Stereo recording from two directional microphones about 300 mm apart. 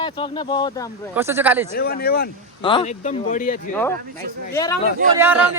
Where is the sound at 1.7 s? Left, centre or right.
Left.